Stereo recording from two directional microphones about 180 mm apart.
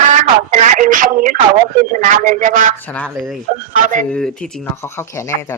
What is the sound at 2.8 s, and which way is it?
Speech, 10° left (ahead or behind).